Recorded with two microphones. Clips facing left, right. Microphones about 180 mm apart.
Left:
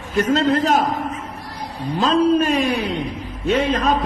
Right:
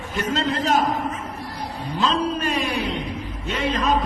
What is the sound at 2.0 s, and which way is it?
Speech, 45° left (ahead or behind).